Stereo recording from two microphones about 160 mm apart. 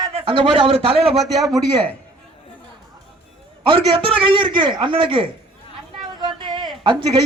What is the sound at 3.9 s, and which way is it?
Speech, 35° right (ahead or behind).